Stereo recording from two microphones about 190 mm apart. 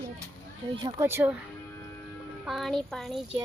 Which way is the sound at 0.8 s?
15° right (ahead or behind).